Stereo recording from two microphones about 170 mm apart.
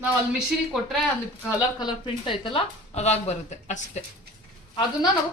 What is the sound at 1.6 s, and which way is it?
Speech, 25° left (ahead or behind).